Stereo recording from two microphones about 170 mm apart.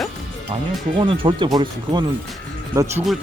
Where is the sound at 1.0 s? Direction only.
30° right (ahead or behind).